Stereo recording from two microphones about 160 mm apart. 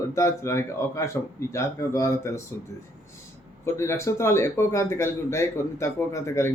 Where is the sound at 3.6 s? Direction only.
15° left (ahead or behind).